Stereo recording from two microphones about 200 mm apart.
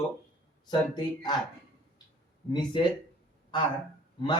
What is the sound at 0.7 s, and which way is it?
Speech, 20° left (ahead or behind).